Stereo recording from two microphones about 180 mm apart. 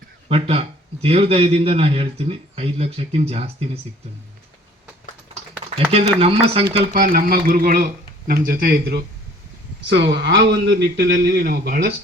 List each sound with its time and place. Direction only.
0.3 s speech: 35° right (ahead or behind)
5.3 s speech: 35° right (ahead or behind)
6.9 s a man's voice: 50° right (ahead or behind)
9.9 s a man's voice: 85° right; by 11.9 s 60° right (ahead or behind)